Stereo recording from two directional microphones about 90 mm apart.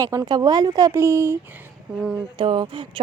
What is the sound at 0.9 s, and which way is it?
Speech, 30° right (ahead or behind).